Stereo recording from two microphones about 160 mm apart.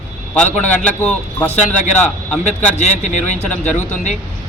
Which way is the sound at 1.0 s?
10° left (ahead or behind).